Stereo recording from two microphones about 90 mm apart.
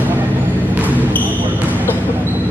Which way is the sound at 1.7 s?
20° right (ahead or behind).